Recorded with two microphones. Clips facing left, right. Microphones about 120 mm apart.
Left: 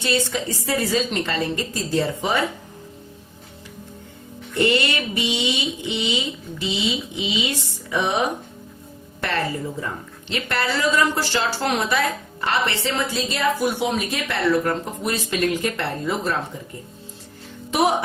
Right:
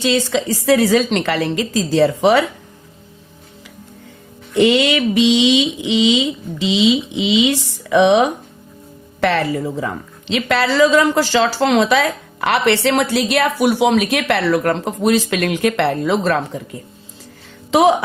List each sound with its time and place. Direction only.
0.0 s a woman's voice: 90° right
4.5 s a woman's voice: 90° right
17.7 s speech: 90° right